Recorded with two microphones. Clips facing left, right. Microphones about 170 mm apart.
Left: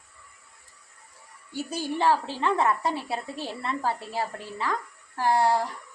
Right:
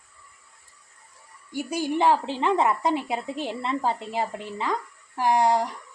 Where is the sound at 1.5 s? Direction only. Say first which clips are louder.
Right 4 dB; 15° right (ahead or behind).